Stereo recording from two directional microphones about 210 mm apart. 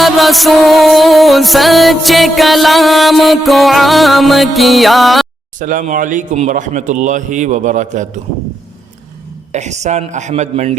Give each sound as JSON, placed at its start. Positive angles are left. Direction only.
{"t": 0.0, "sound": "music", "side_deg": 0}
{"t": 5.5, "sound": "a man's voice", "side_deg": -35}
{"t": 9.5, "sound": "a man's voice", "side_deg": -35}